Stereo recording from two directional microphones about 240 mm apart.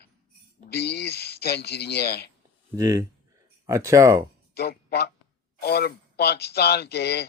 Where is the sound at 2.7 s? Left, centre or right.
Centre.